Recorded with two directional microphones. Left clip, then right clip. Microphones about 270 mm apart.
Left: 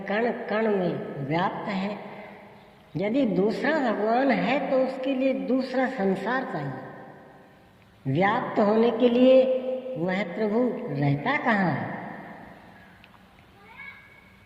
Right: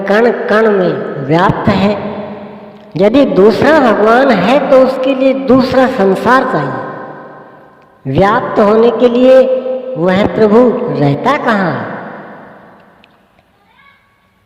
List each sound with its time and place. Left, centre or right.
0.0 s a woman's voice: right
8.0 s a woman's voice: right